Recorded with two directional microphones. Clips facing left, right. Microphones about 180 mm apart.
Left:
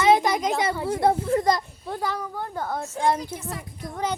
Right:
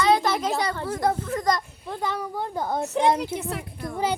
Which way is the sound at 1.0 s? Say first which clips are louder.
Left 3 dB; 25° left (ahead or behind).